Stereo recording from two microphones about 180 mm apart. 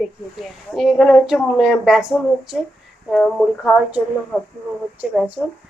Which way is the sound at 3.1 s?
Centre (ahead or behind).